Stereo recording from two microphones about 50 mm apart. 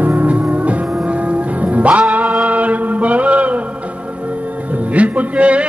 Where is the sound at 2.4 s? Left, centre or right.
Right.